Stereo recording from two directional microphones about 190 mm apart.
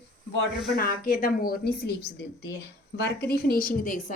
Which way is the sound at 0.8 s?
50° left (ahead or behind).